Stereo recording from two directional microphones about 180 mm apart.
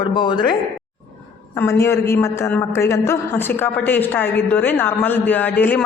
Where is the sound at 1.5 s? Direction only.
15° left (ahead or behind).